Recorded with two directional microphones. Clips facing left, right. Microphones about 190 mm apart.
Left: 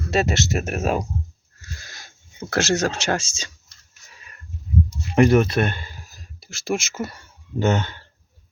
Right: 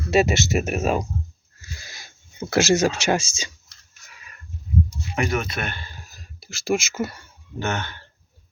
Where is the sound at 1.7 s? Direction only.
10° right (ahead or behind).